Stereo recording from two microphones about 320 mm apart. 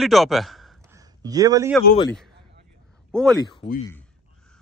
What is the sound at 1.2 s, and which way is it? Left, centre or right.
Speech, centre.